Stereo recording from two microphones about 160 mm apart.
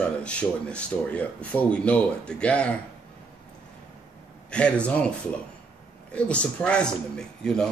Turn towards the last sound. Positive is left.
turn(degrees=5)  # may be behind; listen again after turning